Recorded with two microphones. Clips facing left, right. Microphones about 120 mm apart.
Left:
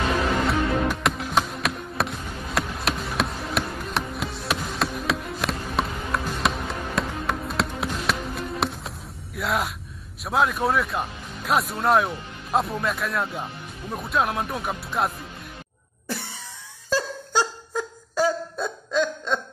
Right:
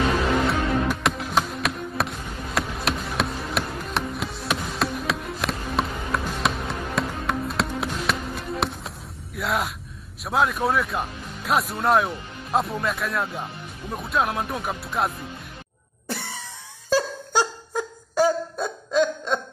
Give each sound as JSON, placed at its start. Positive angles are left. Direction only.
{"t": 0.5, "sound": "music", "side_deg": 0}
{"t": 10.2, "sound": "speech", "side_deg": 0}
{"t": 16.9, "sound": "a sound", "side_deg": -15}